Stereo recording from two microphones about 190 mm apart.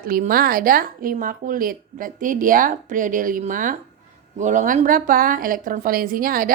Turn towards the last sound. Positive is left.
turn(degrees=-50)  # may be behind; listen again after turning